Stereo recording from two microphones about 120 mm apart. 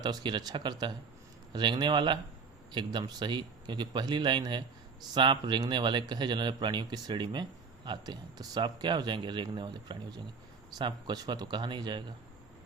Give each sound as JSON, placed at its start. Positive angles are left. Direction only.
{"t": 0.0, "sound": "speech", "side_deg": -35}